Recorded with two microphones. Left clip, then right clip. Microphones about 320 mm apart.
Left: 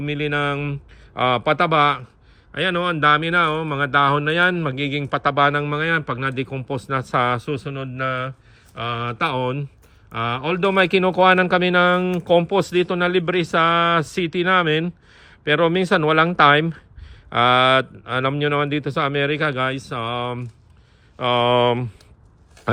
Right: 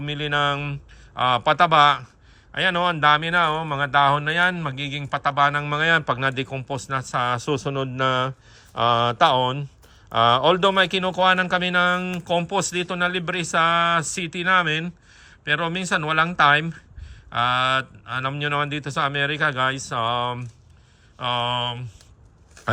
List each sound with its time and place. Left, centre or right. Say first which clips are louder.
0.0 s speech: even; centre